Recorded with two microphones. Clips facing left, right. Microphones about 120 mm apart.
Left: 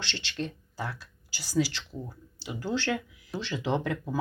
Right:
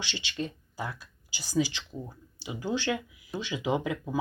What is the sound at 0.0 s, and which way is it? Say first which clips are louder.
Speech: even; 10° right (ahead or behind).